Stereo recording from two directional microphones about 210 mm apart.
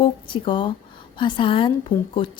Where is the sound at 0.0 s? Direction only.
25° left (ahead or behind).